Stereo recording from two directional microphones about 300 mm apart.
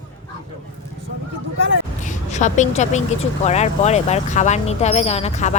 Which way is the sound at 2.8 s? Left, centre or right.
Left.